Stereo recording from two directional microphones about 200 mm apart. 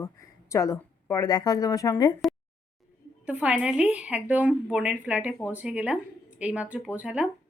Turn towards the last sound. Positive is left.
turn(degrees=-5)  # may be behind; listen again after turning